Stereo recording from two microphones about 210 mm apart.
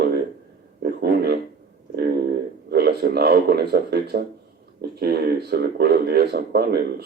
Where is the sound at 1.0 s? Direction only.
50° right (ahead or behind).